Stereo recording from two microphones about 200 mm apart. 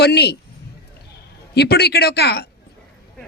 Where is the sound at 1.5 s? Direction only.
55° left (ahead or behind).